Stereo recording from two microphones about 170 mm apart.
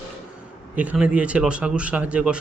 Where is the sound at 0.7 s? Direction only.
10° right (ahead or behind).